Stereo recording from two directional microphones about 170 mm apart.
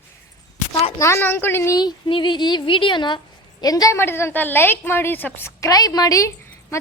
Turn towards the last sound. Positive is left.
turn(degrees=15)  # may be behind; listen again after turning